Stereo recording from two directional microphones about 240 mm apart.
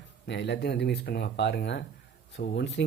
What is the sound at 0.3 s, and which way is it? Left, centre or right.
Speech, left.